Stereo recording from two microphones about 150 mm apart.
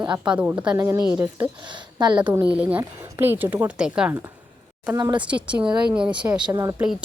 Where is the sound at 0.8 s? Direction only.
20° right (ahead or behind).